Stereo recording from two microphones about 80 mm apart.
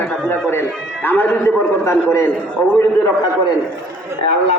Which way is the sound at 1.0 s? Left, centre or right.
Left.